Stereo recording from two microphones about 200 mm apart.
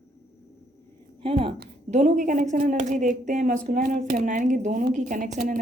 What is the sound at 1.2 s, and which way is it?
A woman's voice, 25° right (ahead or behind).